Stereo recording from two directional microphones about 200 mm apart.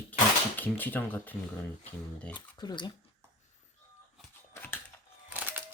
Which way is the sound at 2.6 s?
20° left (ahead or behind).